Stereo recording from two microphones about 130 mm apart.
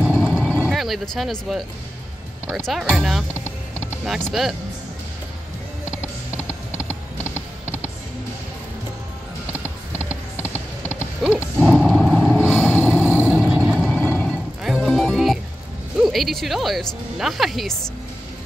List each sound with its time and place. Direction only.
0.0 s vehicle: 5° right (ahead or behind)
0.4 s vehicle: 10° left (ahead or behind)
0.7 s speech: centre (ahead or behind)
2.6 s speech: centre (ahead or behind)
9.9 s music: 15° left (ahead or behind)
11.6 s vehicle: centre (ahead or behind)
12.4 s vehicle: 15° left (ahead or behind)
13.0 s vehicle: 10° right (ahead or behind)
13.8 s vehicle: 10° left (ahead or behind)
14.6 s music: 5° right (ahead or behind)
16.0 s speech: centre (ahead or behind)